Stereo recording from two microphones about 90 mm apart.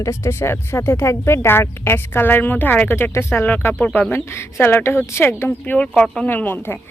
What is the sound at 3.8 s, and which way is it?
Speech, 15° left (ahead or behind).